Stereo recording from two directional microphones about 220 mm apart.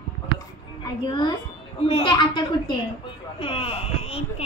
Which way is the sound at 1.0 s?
20° left (ahead or behind).